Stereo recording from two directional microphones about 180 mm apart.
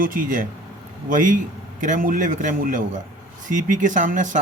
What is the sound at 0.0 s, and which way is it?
Speech, 50° right (ahead or behind).